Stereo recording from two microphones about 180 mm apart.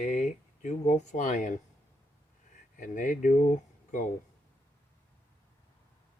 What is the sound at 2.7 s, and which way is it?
Speech, 45° left (ahead or behind).